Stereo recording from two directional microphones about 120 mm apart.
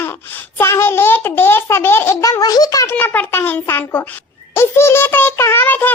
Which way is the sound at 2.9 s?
15° left (ahead or behind).